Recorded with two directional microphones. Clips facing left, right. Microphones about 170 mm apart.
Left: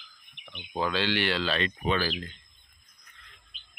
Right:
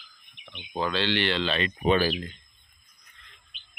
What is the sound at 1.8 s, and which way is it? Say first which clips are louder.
Speech: right 8 dB; 20° right (ahead or behind).